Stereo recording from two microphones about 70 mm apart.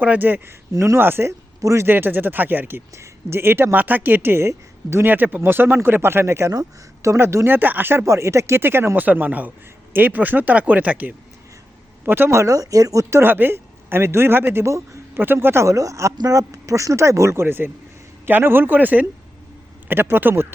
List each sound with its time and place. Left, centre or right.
0.0 s speech: right
0.7 s speech: right
0.9 s a woman's voice: right
1.3 s speech: right
1.9 s speech: right
2.9 s a woman's voice: right
5.0 s a woman's voice: right
7.5 s speech: right
8.0 s a woman's voice: right
12.3 s speech: right
13.2 s a man's voice: right
15.7 s speech: right